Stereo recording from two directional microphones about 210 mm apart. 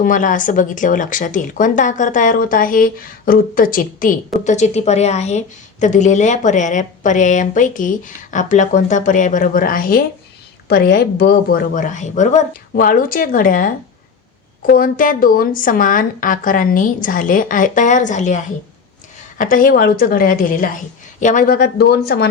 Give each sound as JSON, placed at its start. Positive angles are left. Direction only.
{"t": 0.0, "sound": "a woman's voice", "side_deg": 40}
{"t": 14.7, "sound": "a woman's voice", "side_deg": 40}